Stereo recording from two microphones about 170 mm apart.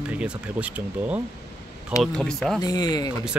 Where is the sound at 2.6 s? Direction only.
25° left (ahead or behind).